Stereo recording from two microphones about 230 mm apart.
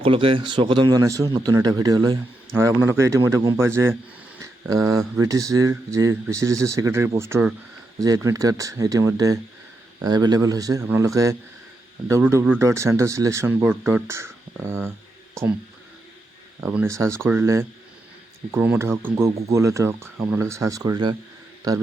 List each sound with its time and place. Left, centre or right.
0.0 s speech: right
16.6 s speech: centre